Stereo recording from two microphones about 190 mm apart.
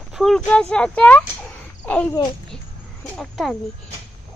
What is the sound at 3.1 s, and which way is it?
Speech, centre (ahead or behind).